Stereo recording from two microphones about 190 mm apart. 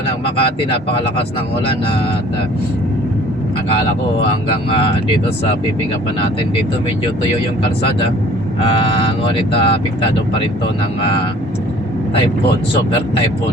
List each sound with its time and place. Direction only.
8.8 s speech: 25° left (ahead or behind)